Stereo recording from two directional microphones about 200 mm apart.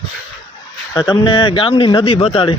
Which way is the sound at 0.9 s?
20° left (ahead or behind).